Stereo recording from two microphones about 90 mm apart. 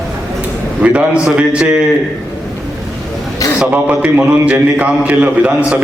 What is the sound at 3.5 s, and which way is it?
A man's voice, 15° right (ahead or behind).